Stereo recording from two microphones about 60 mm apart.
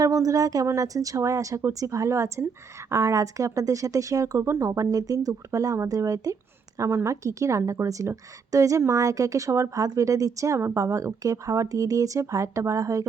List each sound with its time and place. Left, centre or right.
0.0 s a woman's voice: right
4.4 s speech: right
6.7 s a woman's voice: right